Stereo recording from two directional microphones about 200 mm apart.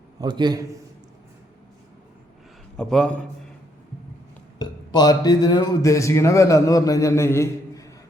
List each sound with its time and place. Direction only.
0.2 s a man's voice: 20° right (ahead or behind)
2.7 s a man's voice: 5° left (ahead or behind)
4.5 s speech: 20° left (ahead or behind)